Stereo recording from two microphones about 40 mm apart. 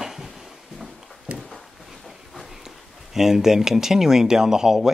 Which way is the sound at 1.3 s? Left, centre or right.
Right.